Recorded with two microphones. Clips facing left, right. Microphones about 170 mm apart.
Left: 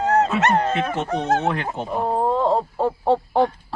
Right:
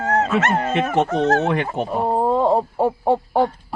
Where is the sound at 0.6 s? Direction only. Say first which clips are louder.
Right 1 dB; 10° right (ahead or behind).